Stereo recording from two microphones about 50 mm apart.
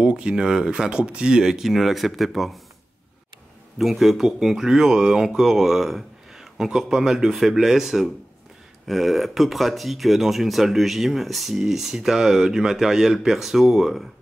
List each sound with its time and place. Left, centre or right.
0.0 s speech: right; by 2.6 s centre
3.7 s speech: centre